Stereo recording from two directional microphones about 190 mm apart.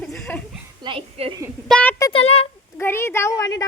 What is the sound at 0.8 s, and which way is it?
Speech, 25° right (ahead or behind).